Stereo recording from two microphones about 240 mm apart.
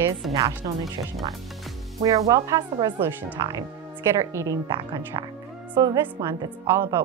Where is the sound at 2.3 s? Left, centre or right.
Centre.